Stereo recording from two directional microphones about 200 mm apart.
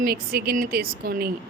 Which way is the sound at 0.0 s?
50° right (ahead or behind).